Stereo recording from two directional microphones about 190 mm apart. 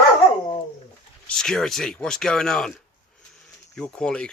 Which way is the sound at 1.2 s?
5° left (ahead or behind).